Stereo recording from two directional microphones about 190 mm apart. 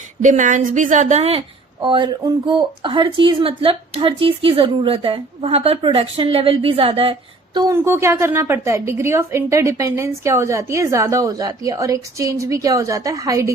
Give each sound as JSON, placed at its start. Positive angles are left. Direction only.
{"t": 0.2, "sound": "a woman's voice", "side_deg": -40}